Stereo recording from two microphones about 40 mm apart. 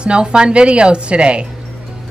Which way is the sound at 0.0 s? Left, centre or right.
Right.